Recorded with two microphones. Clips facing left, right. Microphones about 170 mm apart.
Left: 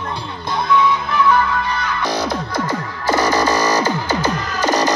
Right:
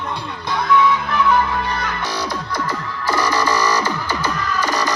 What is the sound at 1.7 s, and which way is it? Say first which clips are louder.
Music: left 2 dB; 45° right (ahead or behind).